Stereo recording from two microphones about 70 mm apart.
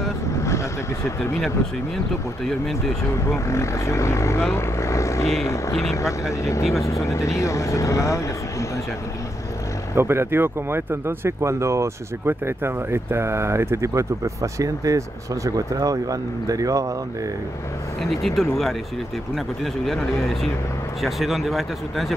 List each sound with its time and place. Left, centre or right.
2.4 s speech: centre
3.3 s speech: left
9.9 s speech: right
18.0 s speech: centre